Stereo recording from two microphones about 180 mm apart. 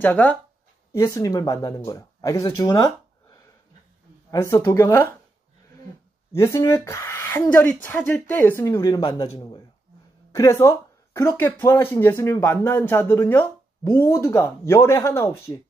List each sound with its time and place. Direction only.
0.0 s speech: 10° left (ahead or behind)
0.9 s speech: 20° left (ahead or behind)
6.3 s speech: 15° left (ahead or behind)